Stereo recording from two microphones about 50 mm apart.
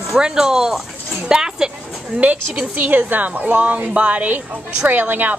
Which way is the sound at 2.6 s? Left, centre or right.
Right.